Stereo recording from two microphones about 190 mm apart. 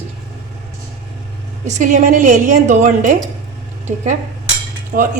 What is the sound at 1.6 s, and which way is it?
A woman's voice, 40° right (ahead or behind).